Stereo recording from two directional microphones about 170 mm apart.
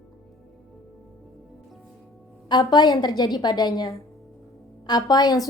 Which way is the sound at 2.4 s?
25° left (ahead or behind).